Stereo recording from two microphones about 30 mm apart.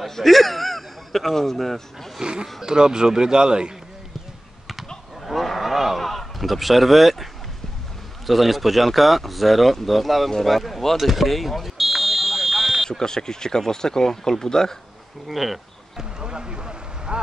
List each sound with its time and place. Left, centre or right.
0.1 s a man's voice: centre
2.2 s speech: right
5.2 s fowl: centre
5.9 s speech: centre
8.3 s speech: centre
11.0 s a sound: centre
13.0 s speech: left
15.2 s speech: centre
16.0 s vehicle: right